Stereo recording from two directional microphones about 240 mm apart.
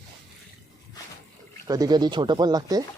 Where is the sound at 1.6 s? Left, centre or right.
Centre.